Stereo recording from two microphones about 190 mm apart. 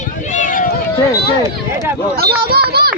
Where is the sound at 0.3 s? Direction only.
45° left (ahead or behind).